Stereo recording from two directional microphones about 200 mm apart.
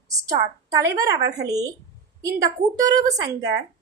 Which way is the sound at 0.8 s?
15° right (ahead or behind).